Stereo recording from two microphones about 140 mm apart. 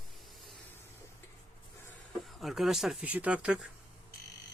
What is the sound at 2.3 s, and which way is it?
Speech, centre (ahead or behind).